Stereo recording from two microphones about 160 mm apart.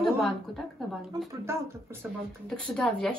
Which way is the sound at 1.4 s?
15° right (ahead or behind).